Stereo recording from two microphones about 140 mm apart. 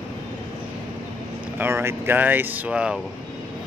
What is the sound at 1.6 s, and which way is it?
Speech, 15° right (ahead or behind).